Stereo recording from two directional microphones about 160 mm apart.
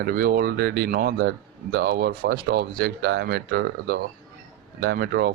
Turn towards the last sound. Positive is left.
turn(degrees=-75)  # may be behind; listen again after turning